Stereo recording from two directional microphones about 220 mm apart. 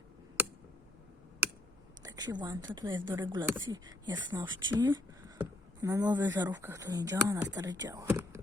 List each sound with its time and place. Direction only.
2.0 s speech: 20° right (ahead or behind)